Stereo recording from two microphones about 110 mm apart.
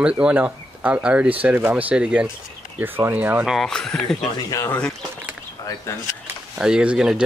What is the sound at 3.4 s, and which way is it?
Speech, centre (ahead or behind).